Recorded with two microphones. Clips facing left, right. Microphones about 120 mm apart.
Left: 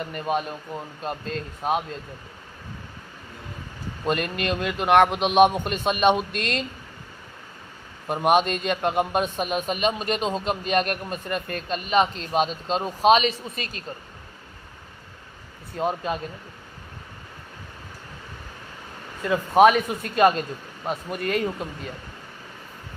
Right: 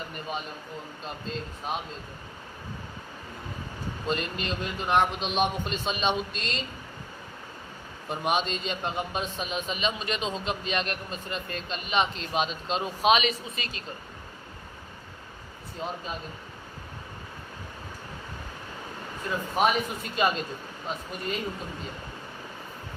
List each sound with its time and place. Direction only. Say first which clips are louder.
0.3 s a man's voice: left 10 dB; 65° left (ahead or behind)
1.0 s a man's voice: left 5 dB; 55° left (ahead or behind)
4.0 s a man's voice: left 6 dB; 60° left (ahead or behind)
8.0 s a man's voice: left 7 dB; 55° left (ahead or behind)
15.8 s a man's voice: left 9 dB; 65° left (ahead or behind)
19.2 s a man's voice: left 9 dB; 70° left (ahead or behind)